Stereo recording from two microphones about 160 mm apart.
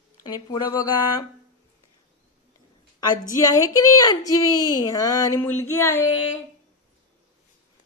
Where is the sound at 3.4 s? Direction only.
20° left (ahead or behind).